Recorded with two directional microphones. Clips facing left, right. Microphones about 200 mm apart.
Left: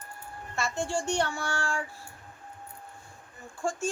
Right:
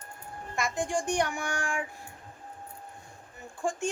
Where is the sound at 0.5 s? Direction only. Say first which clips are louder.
Right 1 dB; 15° right (ahead or behind).